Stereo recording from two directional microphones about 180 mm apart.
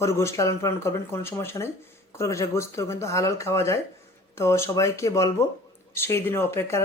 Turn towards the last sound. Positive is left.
turn(degrees=15)  # may be behind; listen again after turning